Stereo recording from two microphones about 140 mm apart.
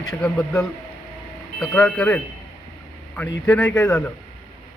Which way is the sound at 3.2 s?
10° left (ahead or behind).